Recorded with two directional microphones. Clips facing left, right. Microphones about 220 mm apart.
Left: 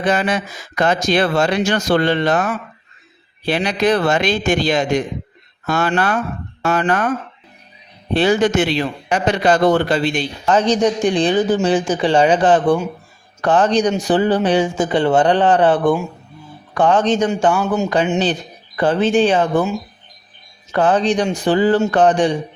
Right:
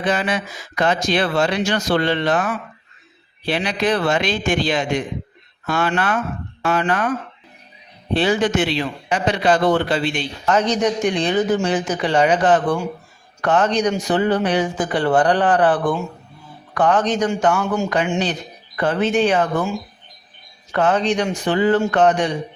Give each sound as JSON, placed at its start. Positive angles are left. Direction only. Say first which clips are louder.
{"t": 0.0, "sound": "speech", "louder": "left 3 dB", "side_deg": 45}
{"t": 8.1, "sound": "speech", "louder": "left 3 dB", "side_deg": 45}
{"t": 20.7, "sound": "speech", "louder": "left 3 dB", "side_deg": 35}